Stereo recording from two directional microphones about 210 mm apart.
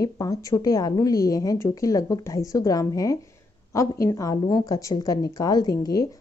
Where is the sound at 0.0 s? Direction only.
15° left (ahead or behind).